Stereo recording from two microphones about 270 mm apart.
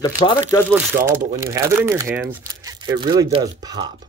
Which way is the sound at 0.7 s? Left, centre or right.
Centre.